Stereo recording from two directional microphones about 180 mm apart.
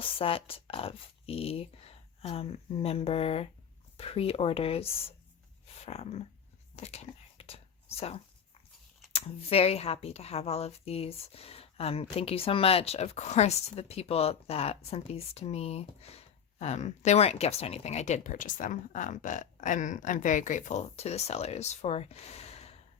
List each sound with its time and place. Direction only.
0.0 s speech: 30° left (ahead or behind)
5.6 s dog: 35° left (ahead or behind)
6.7 s whispering: 35° left (ahead or behind)
9.1 s speech: 35° left (ahead or behind)